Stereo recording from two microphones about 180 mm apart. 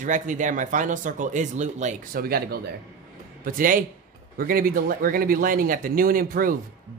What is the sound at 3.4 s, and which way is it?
Speech, 50° right (ahead or behind).